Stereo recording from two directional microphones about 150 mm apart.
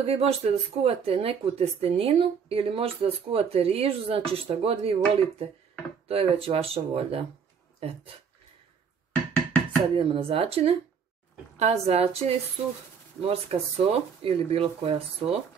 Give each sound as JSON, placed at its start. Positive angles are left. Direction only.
{"t": 0.0, "sound": "speech", "side_deg": -45}
{"t": 9.3, "sound": "music", "side_deg": 15}
{"t": 9.9, "sound": "a woman's voice", "side_deg": -35}